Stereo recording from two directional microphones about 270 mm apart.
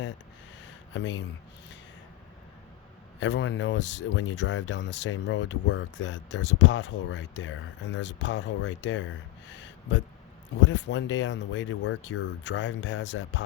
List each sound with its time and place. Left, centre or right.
0.9 s speech: left
3.2 s speech: left